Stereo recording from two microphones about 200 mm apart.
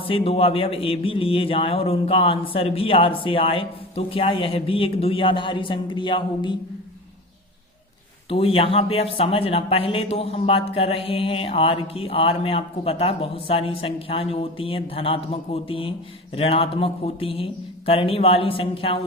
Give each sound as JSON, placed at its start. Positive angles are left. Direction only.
{"t": 0.0, "sound": "speech", "side_deg": 30}
{"t": 8.3, "sound": "speech", "side_deg": 30}